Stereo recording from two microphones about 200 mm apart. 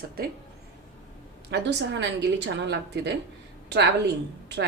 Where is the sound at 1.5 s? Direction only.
60° right (ahead or behind).